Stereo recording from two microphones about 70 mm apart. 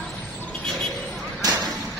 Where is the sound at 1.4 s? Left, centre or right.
Right.